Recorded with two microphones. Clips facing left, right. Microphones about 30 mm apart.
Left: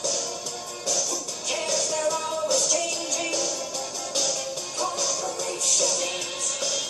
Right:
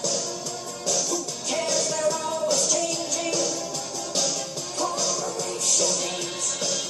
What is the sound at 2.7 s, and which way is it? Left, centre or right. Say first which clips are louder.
Music: right 1 dB; centre.